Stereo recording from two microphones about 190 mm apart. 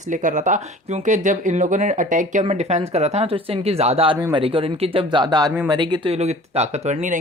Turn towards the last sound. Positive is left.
turn(degrees=-35)  # may be behind; listen again after turning